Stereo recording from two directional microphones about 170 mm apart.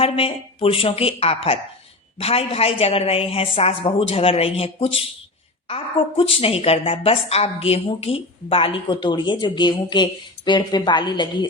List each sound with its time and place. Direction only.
0.0 s a woman's voice: 35° left (ahead or behind)